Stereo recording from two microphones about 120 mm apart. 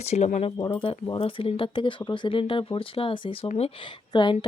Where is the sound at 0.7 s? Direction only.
50° left (ahead or behind).